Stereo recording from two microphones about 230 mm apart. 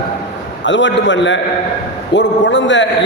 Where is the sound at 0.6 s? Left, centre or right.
Left.